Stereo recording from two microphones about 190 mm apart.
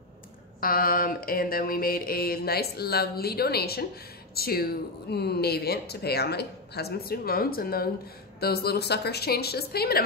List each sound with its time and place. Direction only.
0.6 s mantra: 50° left (ahead or behind)
5.1 s speech: 60° left (ahead or behind)